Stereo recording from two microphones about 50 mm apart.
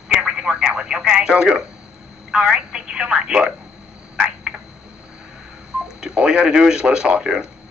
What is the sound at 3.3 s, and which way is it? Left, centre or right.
Speech, centre.